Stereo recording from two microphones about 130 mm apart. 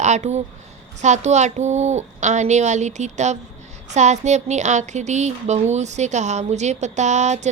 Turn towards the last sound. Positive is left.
turn(degrees=-65)  # may be behind; listen again after turning